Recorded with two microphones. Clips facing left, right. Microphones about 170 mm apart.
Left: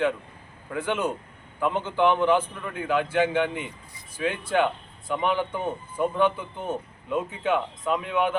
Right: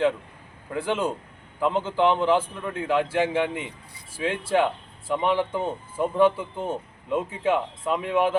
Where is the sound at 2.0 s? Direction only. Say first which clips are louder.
Even; 30° right (ahead or behind).